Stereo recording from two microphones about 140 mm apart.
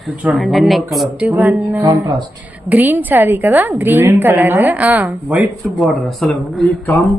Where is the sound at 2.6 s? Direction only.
15° right (ahead or behind).